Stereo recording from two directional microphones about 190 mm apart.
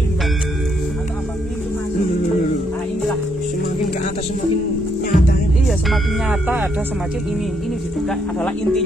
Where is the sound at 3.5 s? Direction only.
45° left (ahead or behind).